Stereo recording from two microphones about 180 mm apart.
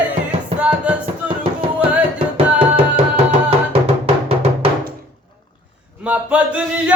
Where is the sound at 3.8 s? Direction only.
35° right (ahead or behind).